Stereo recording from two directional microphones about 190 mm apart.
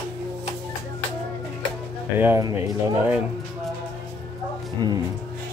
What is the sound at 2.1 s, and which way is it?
Speech, 15° right (ahead or behind).